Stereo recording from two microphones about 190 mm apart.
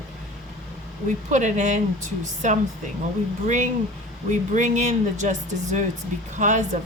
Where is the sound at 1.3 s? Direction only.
40° right (ahead or behind).